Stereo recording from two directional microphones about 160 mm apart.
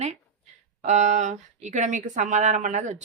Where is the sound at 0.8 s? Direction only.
45° right (ahead or behind).